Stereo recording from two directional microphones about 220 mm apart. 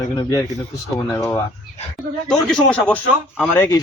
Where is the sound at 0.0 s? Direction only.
15° left (ahead or behind).